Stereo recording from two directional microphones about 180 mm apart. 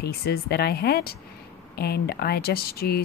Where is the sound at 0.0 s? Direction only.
60° left (ahead or behind).